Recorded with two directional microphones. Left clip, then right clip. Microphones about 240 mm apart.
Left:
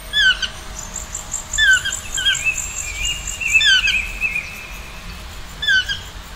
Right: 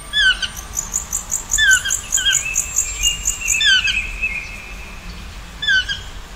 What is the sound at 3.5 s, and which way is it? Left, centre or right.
Bird vocalization, centre.